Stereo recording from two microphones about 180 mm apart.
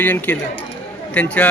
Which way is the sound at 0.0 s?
10° left (ahead or behind).